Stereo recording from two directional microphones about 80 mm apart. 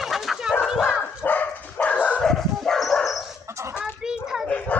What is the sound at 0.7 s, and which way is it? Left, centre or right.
Bow-wow, centre.